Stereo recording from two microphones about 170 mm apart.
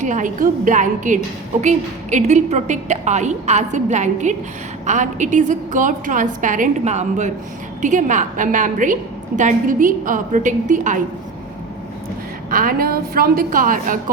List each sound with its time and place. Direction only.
0.0 s a woman's voice: 50° right (ahead or behind)
12.5 s a woman's voice: 55° right (ahead or behind)